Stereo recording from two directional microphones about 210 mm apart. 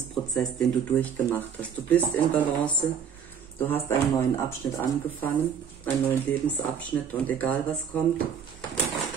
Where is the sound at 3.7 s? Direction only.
15° left (ahead or behind).